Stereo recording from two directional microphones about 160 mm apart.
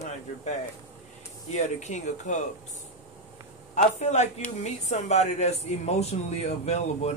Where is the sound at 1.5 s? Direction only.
45° left (ahead or behind).